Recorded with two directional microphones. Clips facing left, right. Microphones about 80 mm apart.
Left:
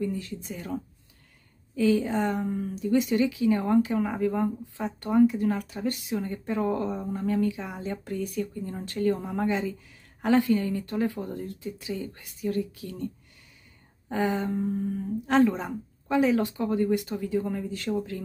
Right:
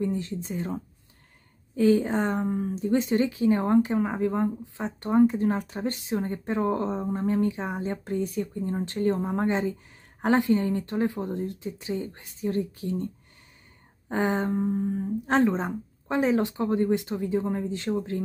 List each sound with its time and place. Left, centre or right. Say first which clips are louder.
0.0 s speech: right 3 dB; right
1.8 s a woman's voice: right 2 dB; right
2.5 s a woman's voice: even; right
14.6 s speech: right 2 dB; right